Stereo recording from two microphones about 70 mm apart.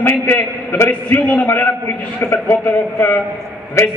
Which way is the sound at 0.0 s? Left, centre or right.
Left.